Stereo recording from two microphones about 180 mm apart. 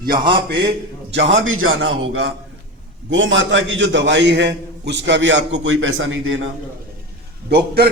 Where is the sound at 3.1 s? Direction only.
90° right.